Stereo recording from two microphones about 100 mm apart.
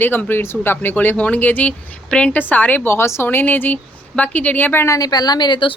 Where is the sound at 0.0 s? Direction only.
20° left (ahead or behind).